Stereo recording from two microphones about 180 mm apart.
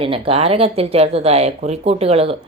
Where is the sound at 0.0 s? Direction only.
30° right (ahead or behind).